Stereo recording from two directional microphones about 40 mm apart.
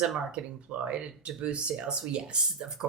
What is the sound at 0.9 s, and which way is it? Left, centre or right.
Speech, right.